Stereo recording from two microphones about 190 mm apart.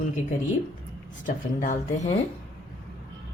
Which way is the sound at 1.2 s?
40° left (ahead or behind).